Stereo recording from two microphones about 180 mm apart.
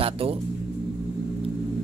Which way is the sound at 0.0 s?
30° right (ahead or behind).